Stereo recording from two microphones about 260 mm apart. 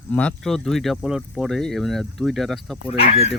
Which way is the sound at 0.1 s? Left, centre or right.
Centre.